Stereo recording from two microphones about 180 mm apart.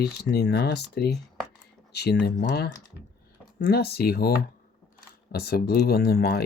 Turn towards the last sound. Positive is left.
turn(degrees=60)  # may be behind; listen again after turning